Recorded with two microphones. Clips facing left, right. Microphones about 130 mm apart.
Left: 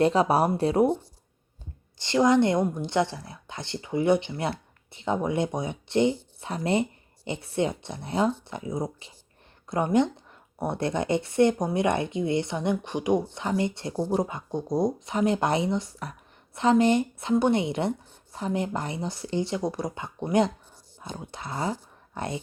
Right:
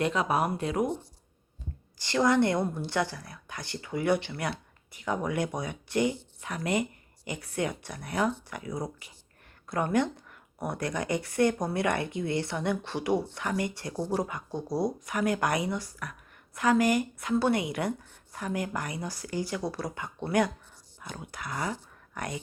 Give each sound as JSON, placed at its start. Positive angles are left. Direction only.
{"t": 0.0, "sound": "speech", "side_deg": 35}
{"t": 2.0, "sound": "speech", "side_deg": 20}